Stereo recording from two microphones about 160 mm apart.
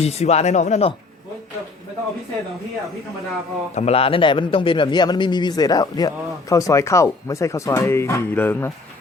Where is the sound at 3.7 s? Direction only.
40° left (ahead or behind); by 8.7 s 15° left (ahead or behind).